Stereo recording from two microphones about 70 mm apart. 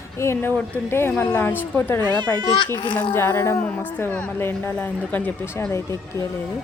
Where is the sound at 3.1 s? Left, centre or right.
Left.